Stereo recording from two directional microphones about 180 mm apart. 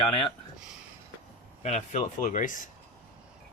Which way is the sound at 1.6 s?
40° left (ahead or behind).